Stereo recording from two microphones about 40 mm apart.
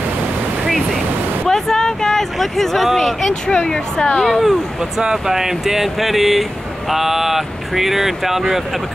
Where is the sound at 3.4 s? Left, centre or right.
Left.